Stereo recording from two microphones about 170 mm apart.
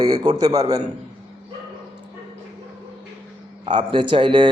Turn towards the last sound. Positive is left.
turn(degrees=-30)  # may be behind; listen again after turning